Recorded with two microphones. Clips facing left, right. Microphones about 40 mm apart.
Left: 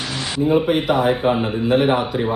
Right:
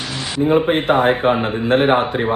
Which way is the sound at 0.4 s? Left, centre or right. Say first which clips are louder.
Right 2 dB; right.